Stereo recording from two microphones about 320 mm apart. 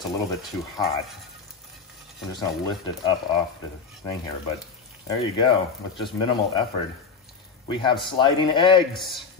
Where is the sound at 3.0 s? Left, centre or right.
Centre.